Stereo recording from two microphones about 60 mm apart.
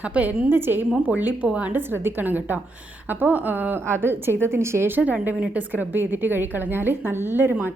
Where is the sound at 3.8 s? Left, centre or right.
Right.